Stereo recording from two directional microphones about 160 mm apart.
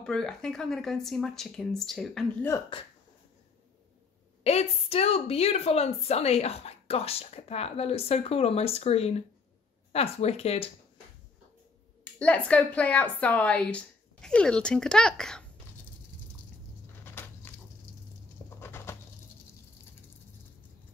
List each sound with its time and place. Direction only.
0.0 s speech: 5° left (ahead or behind)
2.7 s a woman's voice: 30° left (ahead or behind)
4.4 s a woman's voice: 40° left (ahead or behind)
12.0 s speech: 10° left (ahead or behind)
17.0 s a sound: 15° left (ahead or behind)
18.6 s bird: 15° left (ahead or behind)